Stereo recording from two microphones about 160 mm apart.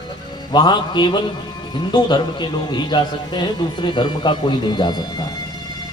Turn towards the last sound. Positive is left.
turn(degrees=30)  # may be behind; listen again after turning